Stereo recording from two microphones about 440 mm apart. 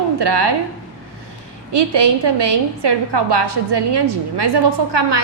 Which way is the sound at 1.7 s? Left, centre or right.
Right.